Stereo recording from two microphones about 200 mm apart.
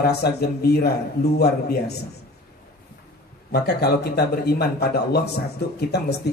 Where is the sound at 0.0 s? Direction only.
55° left (ahead or behind).